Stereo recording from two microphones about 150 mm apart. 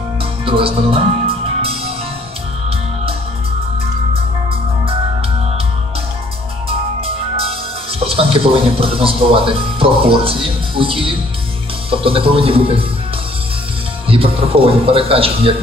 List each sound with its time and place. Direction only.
0.5 s music: 40° right (ahead or behind)
4.1 s music: 40° right (ahead or behind)
7.0 s music: 40° right (ahead or behind)
8.0 s speech: 40° right (ahead or behind)
14.0 s speech: 40° right (ahead or behind)